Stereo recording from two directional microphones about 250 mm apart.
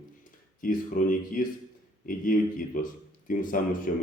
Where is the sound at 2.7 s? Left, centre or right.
Left.